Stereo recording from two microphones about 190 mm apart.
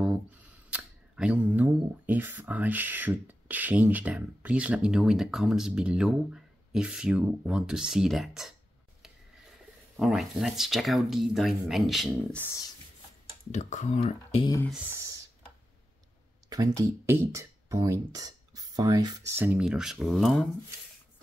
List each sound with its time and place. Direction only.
0.7 s speech: 5° right (ahead or behind)
9.9 s speech: centre (ahead or behind)
13.5 s speech: 40° left (ahead or behind)
14.7 s speech: 10° right (ahead or behind)
16.4 s speech: 20° right (ahead or behind); by 20.4 s centre (ahead or behind)